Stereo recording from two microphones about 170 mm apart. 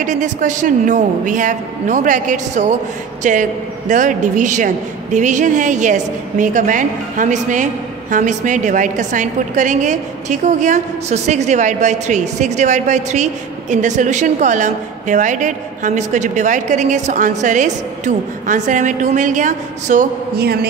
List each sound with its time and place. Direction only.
0.0 s a woman's voice: 45° right (ahead or behind)
20.3 s a man's voice: 65° right (ahead or behind)